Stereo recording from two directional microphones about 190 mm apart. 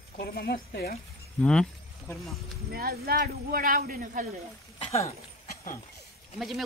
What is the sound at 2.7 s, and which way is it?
A man's voice, 50° right (ahead or behind).